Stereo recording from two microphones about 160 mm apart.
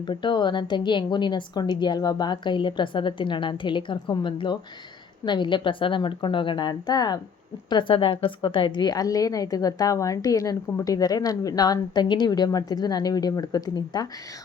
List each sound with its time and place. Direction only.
0.0 s a woman's voice: 30° left (ahead or behind)